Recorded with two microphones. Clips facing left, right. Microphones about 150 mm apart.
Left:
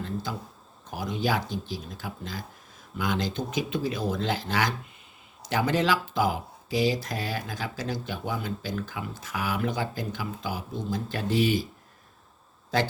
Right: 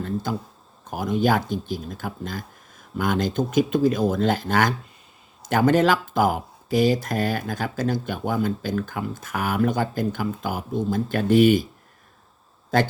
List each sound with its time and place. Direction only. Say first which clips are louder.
0.0 s speech: right 6 dB; 50° right (ahead or behind)
12.7 s speech: right 5 dB; 50° right (ahead or behind)